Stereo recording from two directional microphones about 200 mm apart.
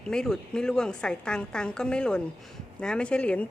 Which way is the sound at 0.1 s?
5° left (ahead or behind).